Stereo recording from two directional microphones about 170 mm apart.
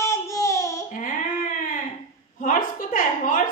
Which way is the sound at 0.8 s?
50° left (ahead or behind).